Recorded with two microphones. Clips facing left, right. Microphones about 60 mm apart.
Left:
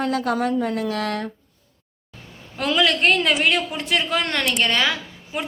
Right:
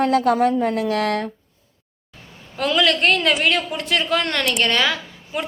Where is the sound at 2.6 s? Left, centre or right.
Centre.